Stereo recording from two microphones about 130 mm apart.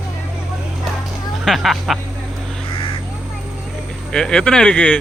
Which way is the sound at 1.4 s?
Centre (ahead or behind).